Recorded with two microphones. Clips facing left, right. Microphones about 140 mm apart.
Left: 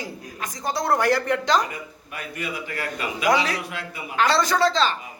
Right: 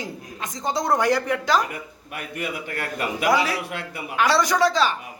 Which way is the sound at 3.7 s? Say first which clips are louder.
Right 2 dB; 55° right (ahead or behind).